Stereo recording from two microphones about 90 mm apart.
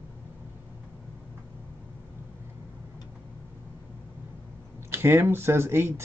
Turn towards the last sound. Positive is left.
turn(degrees=-25)  # may be behind; listen again after turning